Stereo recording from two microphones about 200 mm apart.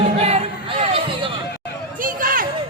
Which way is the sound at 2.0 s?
45° right (ahead or behind).